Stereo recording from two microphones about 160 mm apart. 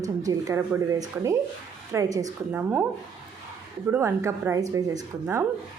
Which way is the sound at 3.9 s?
15° right (ahead or behind).